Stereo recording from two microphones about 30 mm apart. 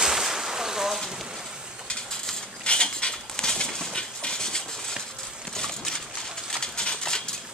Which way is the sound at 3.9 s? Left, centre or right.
Left.